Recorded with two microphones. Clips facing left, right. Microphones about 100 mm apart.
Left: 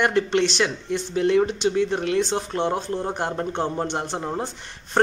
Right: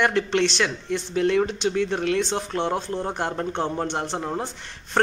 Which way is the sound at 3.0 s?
10° left (ahead or behind).